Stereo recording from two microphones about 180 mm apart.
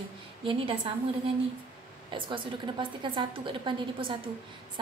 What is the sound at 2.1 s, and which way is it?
A woman's voice, 25° right (ahead or behind).